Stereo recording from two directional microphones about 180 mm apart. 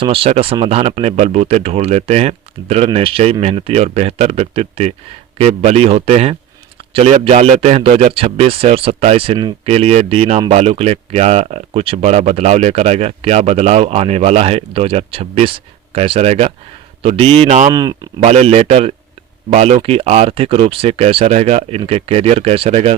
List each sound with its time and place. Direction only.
0.0 s speech: 30° right (ahead or behind)
17.7 s speech: 20° right (ahead or behind)
18.2 s speech: 35° right (ahead or behind)